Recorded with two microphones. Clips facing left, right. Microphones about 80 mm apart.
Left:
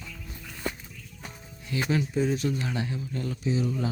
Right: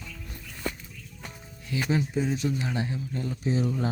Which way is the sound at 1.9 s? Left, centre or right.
Centre.